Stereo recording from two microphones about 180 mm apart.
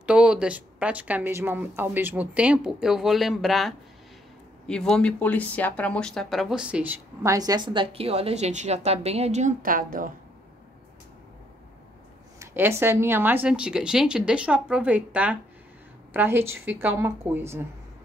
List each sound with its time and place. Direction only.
0.0 s speech: 5° right (ahead or behind)
7.3 s a woman's voice: 20° right (ahead or behind); by 10.1 s 50° right (ahead or behind)
12.4 s speech: 15° right (ahead or behind)